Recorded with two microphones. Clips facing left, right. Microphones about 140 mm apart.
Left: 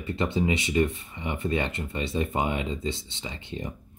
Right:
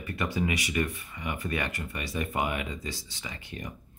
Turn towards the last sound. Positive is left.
turn(degrees=25)  # may be behind; listen again after turning